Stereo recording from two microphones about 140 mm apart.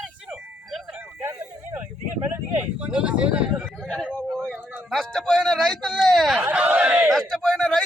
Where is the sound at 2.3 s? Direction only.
10° right (ahead or behind).